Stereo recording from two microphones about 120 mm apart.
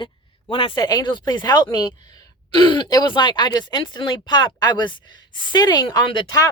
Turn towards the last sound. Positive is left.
turn(degrees=40)  # may be behind; listen again after turning